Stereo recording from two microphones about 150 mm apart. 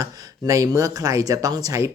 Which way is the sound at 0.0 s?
20° right (ahead or behind).